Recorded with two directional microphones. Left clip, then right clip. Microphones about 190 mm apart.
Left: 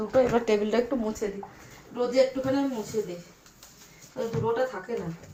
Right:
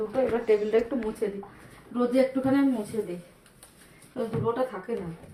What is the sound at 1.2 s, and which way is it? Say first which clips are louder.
Speech: right 2 dB; 10° left (ahead or behind).